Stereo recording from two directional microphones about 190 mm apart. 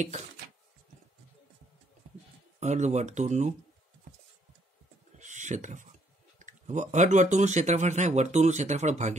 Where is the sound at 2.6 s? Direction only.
40° right (ahead or behind).